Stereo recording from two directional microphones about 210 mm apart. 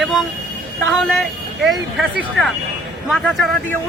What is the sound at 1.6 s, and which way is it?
Speech, centre (ahead or behind).